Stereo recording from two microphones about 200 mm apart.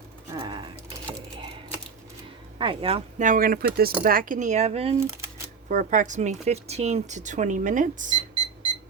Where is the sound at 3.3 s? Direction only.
45° right (ahead or behind).